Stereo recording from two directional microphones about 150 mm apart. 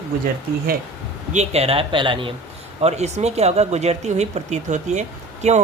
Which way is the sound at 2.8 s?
45° right (ahead or behind).